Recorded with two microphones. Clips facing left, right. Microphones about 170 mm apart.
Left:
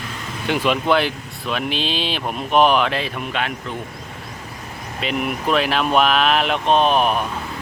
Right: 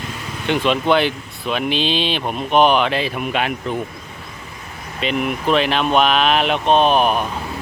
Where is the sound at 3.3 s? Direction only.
10° right (ahead or behind).